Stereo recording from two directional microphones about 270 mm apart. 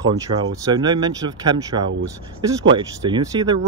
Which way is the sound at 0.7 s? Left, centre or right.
Centre.